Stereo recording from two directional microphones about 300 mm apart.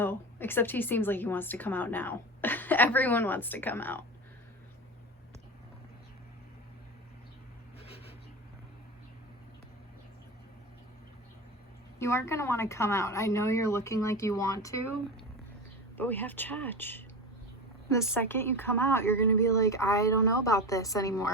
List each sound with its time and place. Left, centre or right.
0.0 s a woman's voice: centre
7.9 s a sound: centre
11.9 s a woman's voice: centre
16.0 s a woman's voice: centre